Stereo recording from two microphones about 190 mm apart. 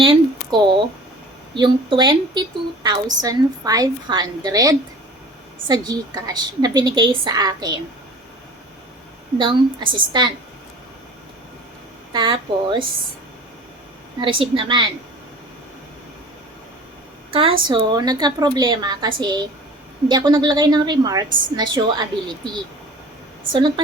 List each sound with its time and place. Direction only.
0.0 s a woman's voice: 25° right (ahead or behind)
9.4 s a woman's voice: 25° right (ahead or behind)
12.1 s a woman's voice: 25° right (ahead or behind)
14.2 s a woman's voice: 25° right (ahead or behind)
17.3 s a woman's voice: 30° right (ahead or behind)
23.5 s a woman's voice: 25° right (ahead or behind)